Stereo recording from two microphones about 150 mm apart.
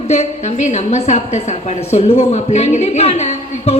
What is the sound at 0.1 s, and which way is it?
A woman's voice, 45° left (ahead or behind).